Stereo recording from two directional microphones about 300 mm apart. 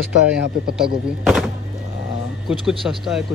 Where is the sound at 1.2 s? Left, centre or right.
Centre.